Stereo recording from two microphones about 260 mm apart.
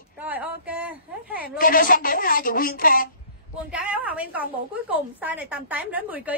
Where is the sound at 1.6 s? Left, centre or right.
Left.